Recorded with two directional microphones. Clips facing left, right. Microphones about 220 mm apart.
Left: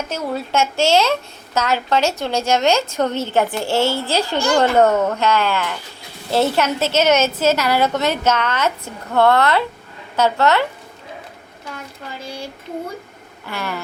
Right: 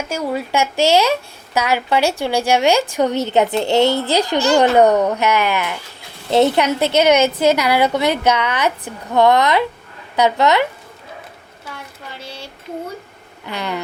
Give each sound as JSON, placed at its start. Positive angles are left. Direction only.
{"t": 0.1, "sound": "a woman's voice", "side_deg": -10}
{"t": 13.5, "sound": "a woman's voice", "side_deg": -20}